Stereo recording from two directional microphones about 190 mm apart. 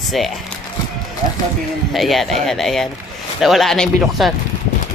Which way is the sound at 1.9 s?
Centre (ahead or behind).